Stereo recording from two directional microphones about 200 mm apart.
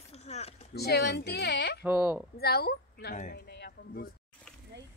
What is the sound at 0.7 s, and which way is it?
Speech, 55° left (ahead or behind).